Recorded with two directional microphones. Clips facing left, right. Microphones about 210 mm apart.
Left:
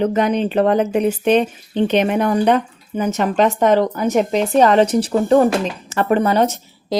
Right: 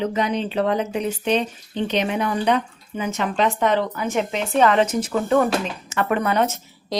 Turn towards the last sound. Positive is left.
turn(degrees=35)  # may be behind; listen again after turning